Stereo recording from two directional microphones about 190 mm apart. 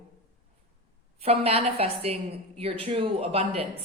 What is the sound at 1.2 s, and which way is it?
A woman's voice, 30° right (ahead or behind).